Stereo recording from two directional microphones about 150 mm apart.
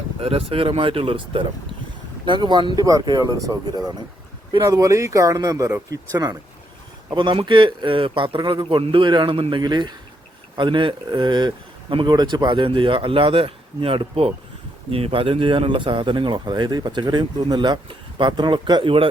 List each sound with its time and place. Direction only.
0.2 s speech: 40° right (ahead or behind); by 6.3 s 25° right (ahead or behind)
7.1 s speech: 35° right (ahead or behind)